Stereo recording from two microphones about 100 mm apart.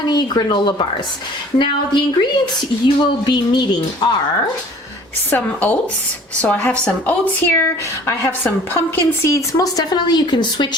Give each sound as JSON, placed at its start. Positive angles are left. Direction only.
{"t": 0.0, "sound": "speech", "side_deg": 45}
{"t": 5.3, "sound": "a woman's voice", "side_deg": 15}